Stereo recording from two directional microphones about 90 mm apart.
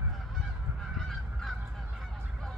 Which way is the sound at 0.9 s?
5° left (ahead or behind).